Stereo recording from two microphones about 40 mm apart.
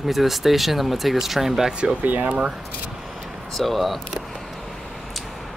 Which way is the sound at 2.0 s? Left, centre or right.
Right.